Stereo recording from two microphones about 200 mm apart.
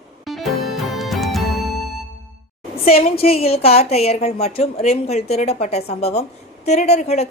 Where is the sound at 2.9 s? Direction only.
30° left (ahead or behind).